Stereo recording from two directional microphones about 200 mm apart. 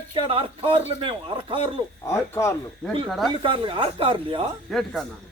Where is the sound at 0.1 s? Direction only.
25° right (ahead or behind).